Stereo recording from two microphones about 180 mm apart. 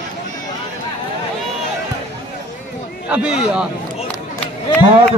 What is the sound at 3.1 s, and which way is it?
Speech, 5° right (ahead or behind).